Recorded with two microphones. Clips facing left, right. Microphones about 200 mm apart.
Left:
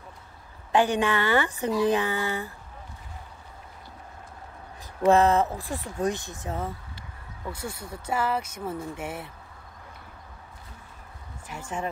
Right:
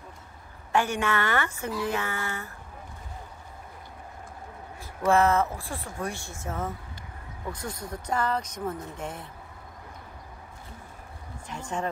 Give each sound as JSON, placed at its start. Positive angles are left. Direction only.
{"t": 0.7, "sound": "speech", "side_deg": 15}
{"t": 5.0, "sound": "speech", "side_deg": 15}
{"t": 11.4, "sound": "speech", "side_deg": 10}